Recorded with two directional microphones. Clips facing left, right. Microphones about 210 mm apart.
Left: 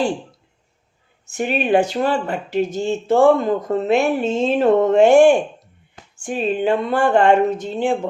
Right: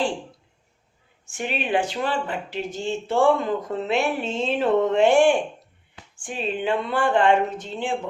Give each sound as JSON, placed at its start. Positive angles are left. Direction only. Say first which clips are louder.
{"t": 1.2, "sound": "speech", "louder": "left 7 dB", "side_deg": 40}